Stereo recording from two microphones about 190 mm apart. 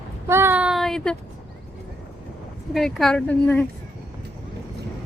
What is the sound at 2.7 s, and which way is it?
Speech, centre (ahead or behind).